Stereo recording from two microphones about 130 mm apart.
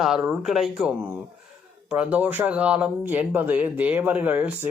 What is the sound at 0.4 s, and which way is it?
Speech, centre (ahead or behind).